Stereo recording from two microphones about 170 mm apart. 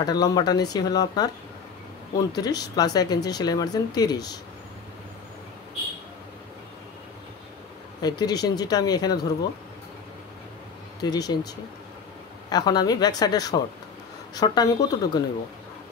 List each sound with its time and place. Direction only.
0.0 s speech: 25° left (ahead or behind)
8.0 s speech: 25° left (ahead or behind)
11.0 s speech: 25° left (ahead or behind)
12.4 s speech: 25° left (ahead or behind)